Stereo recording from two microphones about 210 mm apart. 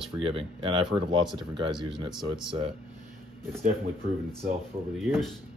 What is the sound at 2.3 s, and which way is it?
Speech, 25° right (ahead or behind).